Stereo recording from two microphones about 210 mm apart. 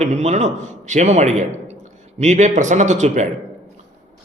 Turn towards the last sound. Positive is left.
turn(degrees=-35)  # may be behind; listen again after turning